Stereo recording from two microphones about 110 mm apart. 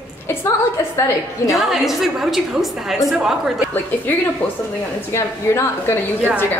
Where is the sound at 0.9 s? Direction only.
30° left (ahead or behind).